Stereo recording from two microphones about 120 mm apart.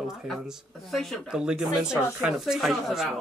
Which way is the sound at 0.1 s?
5° right (ahead or behind).